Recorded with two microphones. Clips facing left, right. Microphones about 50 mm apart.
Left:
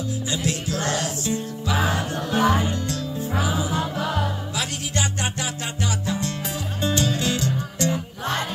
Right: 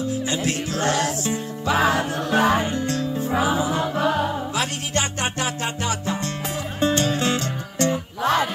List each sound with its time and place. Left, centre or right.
0.3 s music: right
1.8 s music: right
2.6 s music: right